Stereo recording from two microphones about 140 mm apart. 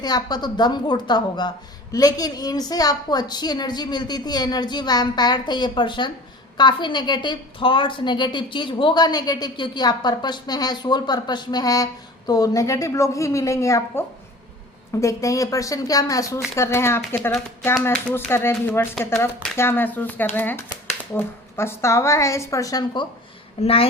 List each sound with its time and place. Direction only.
0.0 s a woman's voice: 30° left (ahead or behind)
15.0 s a woman's voice: 25° left (ahead or behind)
23.6 s a woman's voice: 45° left (ahead or behind)